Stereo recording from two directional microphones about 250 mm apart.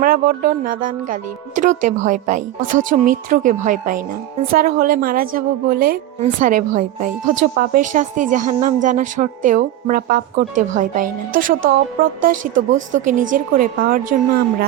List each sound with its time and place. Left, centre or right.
0.0 s a woman's voice: right